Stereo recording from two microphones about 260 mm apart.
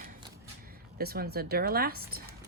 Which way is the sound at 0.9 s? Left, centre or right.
Right.